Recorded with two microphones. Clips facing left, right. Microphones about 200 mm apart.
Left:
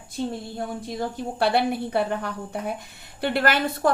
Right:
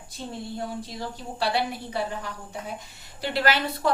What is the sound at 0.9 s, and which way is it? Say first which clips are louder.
A woman's voice: left 9 dB; 55° left (ahead or behind).